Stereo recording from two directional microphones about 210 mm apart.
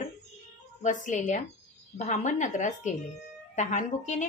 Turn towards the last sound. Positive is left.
turn(degrees=35)  # may be behind; listen again after turning